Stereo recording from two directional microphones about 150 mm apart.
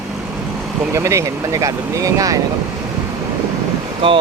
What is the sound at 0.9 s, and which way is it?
Speech, 20° right (ahead or behind).